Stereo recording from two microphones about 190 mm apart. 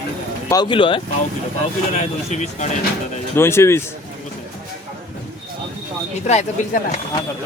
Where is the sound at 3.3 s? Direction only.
15° left (ahead or behind).